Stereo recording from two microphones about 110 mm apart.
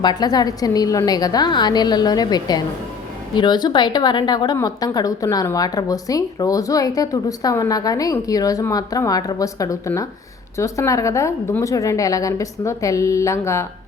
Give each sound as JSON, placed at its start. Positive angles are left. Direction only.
{"t": 0.0, "sound": "a woman's voice", "side_deg": 40}